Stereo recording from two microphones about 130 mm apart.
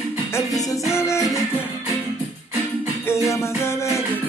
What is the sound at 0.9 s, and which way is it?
Music, 20° left (ahead or behind).